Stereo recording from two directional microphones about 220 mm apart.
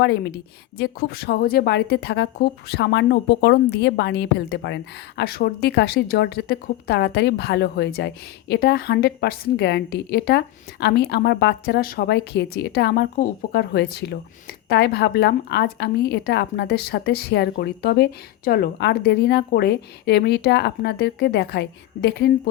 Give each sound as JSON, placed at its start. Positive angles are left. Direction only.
{"t": 0.0, "sound": "a woman's voice", "side_deg": 45}